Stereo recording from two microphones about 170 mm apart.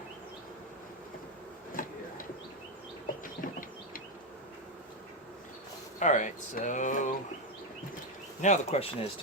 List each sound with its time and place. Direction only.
1.8 s a sound: 55° left (ahead or behind)
6.0 s speech: 45° left (ahead or behind)
8.4 s speech: 40° left (ahead or behind)